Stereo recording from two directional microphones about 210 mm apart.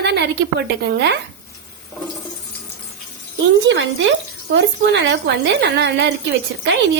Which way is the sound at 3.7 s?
60° right (ahead or behind).